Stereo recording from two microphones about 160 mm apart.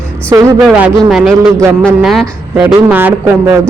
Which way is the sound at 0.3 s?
20° right (ahead or behind).